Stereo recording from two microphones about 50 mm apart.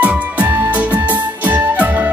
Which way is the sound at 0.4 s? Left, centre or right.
Right.